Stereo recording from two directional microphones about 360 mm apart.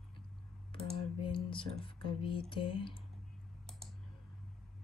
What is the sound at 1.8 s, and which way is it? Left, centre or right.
Speech, centre.